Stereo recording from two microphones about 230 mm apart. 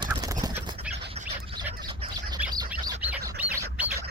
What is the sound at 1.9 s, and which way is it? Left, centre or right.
Bird, right.